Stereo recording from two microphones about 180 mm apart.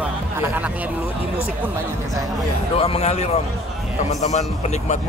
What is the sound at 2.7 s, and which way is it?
A man's voice, 30° left (ahead or behind).